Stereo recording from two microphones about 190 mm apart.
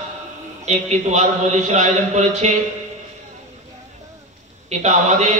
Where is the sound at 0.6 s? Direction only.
35° right (ahead or behind).